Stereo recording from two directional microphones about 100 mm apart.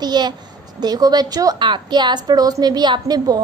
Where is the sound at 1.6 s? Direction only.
50° right (ahead or behind).